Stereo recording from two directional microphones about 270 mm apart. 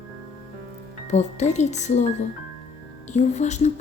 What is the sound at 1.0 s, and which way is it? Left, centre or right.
Speech, left.